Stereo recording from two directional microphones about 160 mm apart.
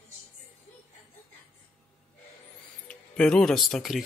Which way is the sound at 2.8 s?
5° left (ahead or behind).